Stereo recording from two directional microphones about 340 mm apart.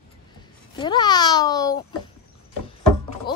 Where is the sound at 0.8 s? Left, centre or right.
Centre.